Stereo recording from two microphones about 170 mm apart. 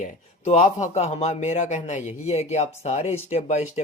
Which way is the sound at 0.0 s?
40° left (ahead or behind).